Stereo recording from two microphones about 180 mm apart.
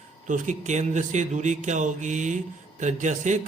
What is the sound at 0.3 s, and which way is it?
A man's voice, 45° right (ahead or behind).